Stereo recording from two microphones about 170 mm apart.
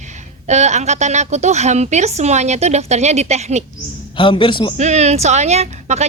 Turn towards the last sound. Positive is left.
turn(degrees=-40)  # may be behind; listen again after turning